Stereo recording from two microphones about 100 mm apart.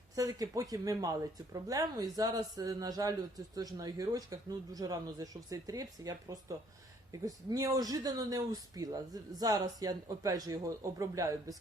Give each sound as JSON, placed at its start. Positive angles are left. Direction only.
{"t": 0.2, "sound": "speech", "side_deg": -35}